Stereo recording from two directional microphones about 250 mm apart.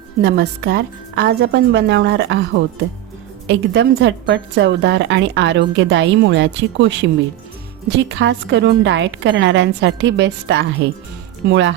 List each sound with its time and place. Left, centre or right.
0.2 s a woman's voice: right